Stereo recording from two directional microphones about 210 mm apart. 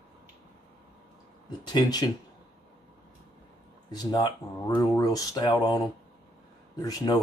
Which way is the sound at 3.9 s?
20° left (ahead or behind).